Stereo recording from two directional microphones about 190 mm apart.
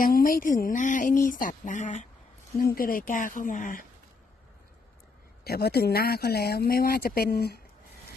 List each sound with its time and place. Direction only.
0.0 s speech: 45° left (ahead or behind)
2.6 s speech: 50° left (ahead or behind)
5.5 s speech: 55° left (ahead or behind)